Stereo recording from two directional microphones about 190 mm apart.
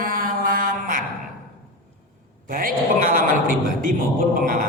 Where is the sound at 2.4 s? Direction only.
45° right (ahead or behind).